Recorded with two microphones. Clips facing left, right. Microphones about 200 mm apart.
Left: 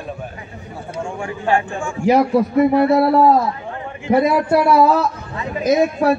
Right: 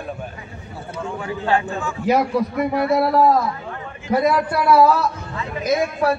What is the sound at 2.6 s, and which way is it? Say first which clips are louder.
A man's voice: left 6 dB; 30° left (ahead or behind).